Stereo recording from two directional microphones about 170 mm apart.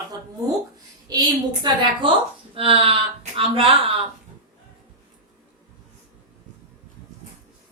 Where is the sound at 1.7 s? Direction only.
25° right (ahead or behind).